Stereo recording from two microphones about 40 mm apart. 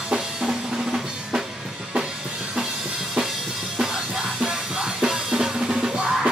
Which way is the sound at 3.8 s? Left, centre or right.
Centre.